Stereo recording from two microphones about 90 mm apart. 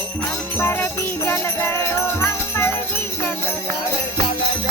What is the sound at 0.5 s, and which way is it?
Music, 25° left (ahead or behind).